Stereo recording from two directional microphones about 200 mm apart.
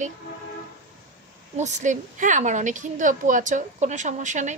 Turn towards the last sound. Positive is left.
turn(degrees=-40)  # may be behind; listen again after turning